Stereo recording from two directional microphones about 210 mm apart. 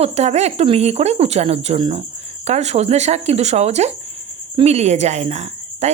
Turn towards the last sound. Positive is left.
turn(degrees=-30)  # may be behind; listen again after turning